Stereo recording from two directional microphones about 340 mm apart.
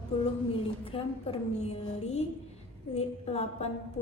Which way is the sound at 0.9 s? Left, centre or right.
Centre.